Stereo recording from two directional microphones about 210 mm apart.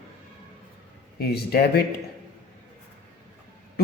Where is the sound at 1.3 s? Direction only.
50° left (ahead or behind).